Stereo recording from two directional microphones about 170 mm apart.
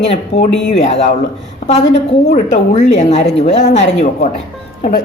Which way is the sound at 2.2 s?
55° left (ahead or behind).